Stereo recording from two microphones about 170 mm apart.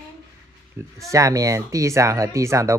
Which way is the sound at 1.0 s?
20° right (ahead or behind).